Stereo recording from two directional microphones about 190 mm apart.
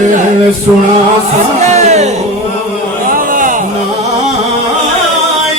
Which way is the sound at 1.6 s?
35° right (ahead or behind).